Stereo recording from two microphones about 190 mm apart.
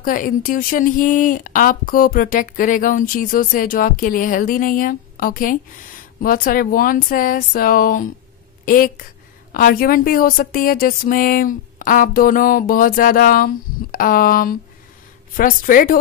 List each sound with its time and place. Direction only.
0.0 s speech: 45° left (ahead or behind)